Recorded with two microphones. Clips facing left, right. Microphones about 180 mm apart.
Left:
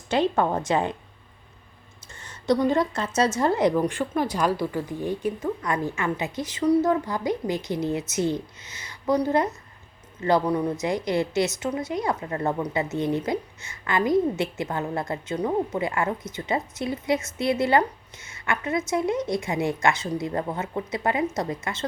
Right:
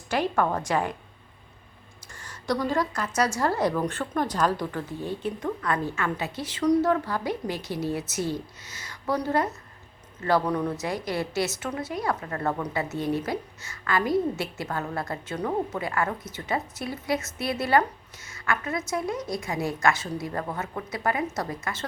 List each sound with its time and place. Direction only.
0.1 s a woman's voice: 20° left (ahead or behind)
2.1 s a woman's voice: 20° left (ahead or behind)
8.6 s speech: 45° right (ahead or behind)
9.0 s a woman's voice: 15° left (ahead or behind)